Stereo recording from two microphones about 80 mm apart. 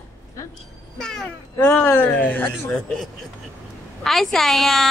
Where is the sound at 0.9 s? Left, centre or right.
Centre.